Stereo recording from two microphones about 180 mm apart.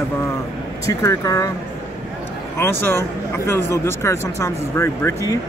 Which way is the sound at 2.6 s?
15° left (ahead or behind).